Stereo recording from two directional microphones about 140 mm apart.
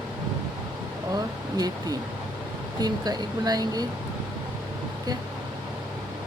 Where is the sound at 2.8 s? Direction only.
30° right (ahead or behind).